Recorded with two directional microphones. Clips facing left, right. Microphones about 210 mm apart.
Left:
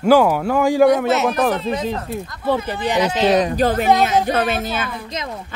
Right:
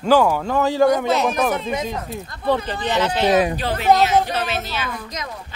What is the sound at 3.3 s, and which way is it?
Speech, 5° right (ahead or behind).